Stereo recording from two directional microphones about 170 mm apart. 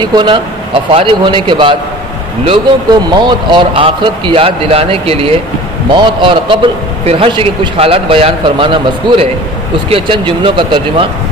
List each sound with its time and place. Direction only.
0.0 s a man's voice: 25° right (ahead or behind)